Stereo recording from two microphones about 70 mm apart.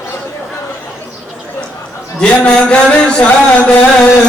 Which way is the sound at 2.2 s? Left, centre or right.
Centre.